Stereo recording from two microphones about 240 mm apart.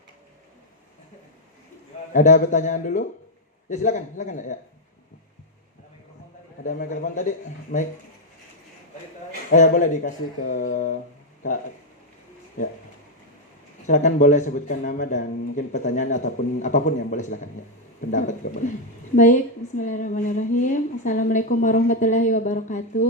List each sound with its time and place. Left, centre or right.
2.1 s a man's voice: left
6.7 s a man's voice: left
9.5 s a man's voice: left
12.6 s a man's voice: left
13.8 s a man's voice: left